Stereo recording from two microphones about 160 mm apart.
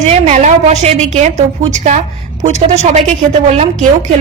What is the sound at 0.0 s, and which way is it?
A woman's voice, 45° right (ahead or behind).